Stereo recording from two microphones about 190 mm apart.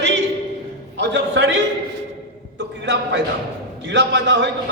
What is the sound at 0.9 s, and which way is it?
Speech, 65° right (ahead or behind).